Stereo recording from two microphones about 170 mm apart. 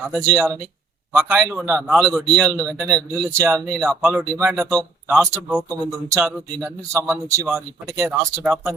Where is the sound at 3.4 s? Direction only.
20° right (ahead or behind).